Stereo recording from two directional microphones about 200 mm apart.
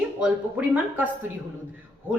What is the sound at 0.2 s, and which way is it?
Speech, 10° right (ahead or behind).